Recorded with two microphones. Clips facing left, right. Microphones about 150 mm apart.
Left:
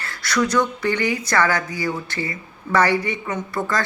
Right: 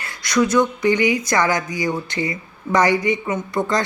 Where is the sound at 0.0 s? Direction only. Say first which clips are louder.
Right 3 dB; 15° right (ahead or behind).